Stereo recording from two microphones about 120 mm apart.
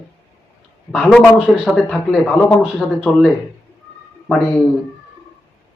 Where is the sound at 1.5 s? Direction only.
5° right (ahead or behind).